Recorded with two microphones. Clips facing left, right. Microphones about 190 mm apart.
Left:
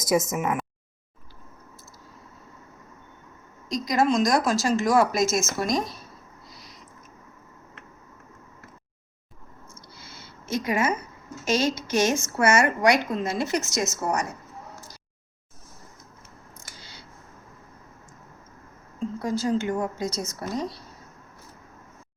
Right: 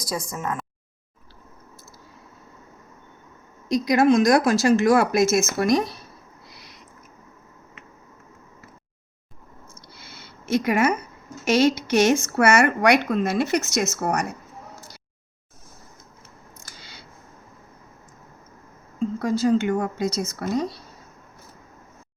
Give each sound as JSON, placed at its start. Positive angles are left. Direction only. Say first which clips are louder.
{"t": 0.0, "sound": "speech", "louder": "left 6 dB", "side_deg": 20}
{"t": 3.7, "sound": "speech", "louder": "right 5 dB", "side_deg": -65}
{"t": 6.5, "sound": "a sound", "louder": "left 1 dB", "side_deg": -65}
{"t": 9.9, "sound": "a sound", "louder": "right 1 dB", "side_deg": -65}
{"t": 11.4, "sound": "speech", "louder": "right 5 dB", "side_deg": -65}
{"t": 19.5, "sound": "speech", "louder": "right 4 dB", "side_deg": -65}